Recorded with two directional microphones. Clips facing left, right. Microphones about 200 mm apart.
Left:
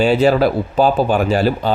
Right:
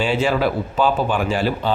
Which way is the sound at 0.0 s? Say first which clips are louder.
Left 6 dB; 40° left (ahead or behind).